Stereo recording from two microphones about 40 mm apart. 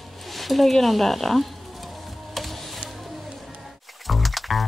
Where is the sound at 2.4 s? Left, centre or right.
Centre.